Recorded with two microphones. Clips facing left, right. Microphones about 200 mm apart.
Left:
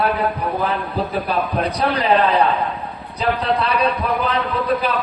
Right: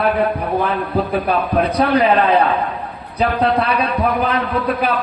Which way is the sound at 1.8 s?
55° right (ahead or behind).